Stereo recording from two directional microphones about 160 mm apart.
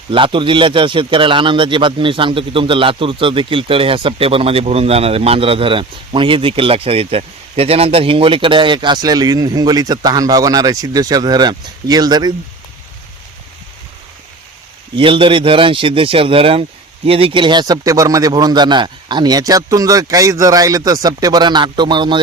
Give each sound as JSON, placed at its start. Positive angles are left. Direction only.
{"t": 0.1, "sound": "speech", "side_deg": -30}
{"t": 14.9, "sound": "speech", "side_deg": -30}